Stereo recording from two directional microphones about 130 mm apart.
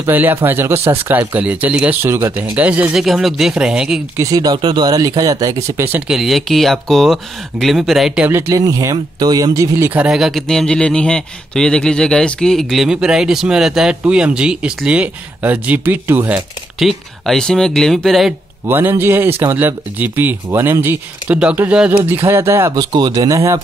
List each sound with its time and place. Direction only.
0.0 s speech: 15° right (ahead or behind)
4.2 s speech: 30° right (ahead or behind)
5.9 s speech: 5° right (ahead or behind)
8.3 s speech: 20° right (ahead or behind)
10.0 s speech: 5° right (ahead or behind)
16.8 s speech: 5° left (ahead or behind)
18.7 s speech: 15° right (ahead or behind)
22.8 s speech: 30° right (ahead or behind)